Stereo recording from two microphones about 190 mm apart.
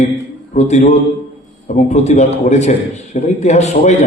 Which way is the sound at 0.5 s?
35° left (ahead or behind).